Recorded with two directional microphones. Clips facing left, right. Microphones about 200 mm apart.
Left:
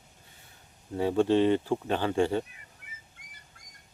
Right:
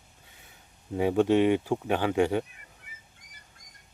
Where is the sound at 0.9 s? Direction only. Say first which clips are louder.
Right 1 dB; 15° right (ahead or behind).